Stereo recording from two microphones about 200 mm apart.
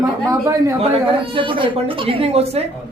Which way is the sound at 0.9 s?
25° right (ahead or behind).